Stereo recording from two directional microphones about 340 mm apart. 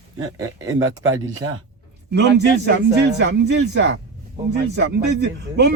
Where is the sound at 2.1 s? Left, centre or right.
Right.